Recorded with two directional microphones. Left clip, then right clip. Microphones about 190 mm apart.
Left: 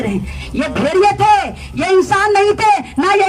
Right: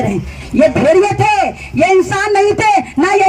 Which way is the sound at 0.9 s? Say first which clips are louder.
Even; 35° right (ahead or behind).